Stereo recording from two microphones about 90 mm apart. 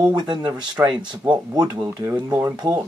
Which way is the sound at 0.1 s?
55° right (ahead or behind).